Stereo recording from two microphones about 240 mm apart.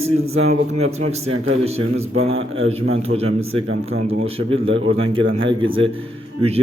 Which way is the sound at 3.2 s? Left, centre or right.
Right.